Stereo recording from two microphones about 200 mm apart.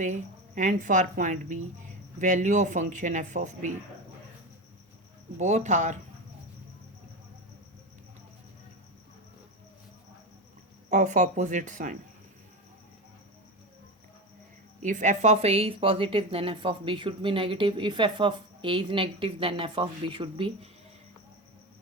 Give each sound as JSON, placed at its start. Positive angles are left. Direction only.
{"t": 0.0, "sound": "a woman's voice", "side_deg": -40}
{"t": 5.4, "sound": "a woman's voice", "side_deg": -35}
{"t": 10.8, "sound": "a woman's voice", "side_deg": -40}
{"t": 14.8, "sound": "speech", "side_deg": -40}